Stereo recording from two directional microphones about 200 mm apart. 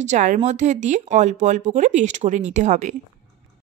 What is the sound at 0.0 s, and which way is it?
A woman's voice, 35° right (ahead or behind).